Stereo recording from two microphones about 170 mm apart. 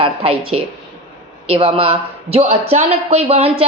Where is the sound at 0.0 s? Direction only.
30° right (ahead or behind).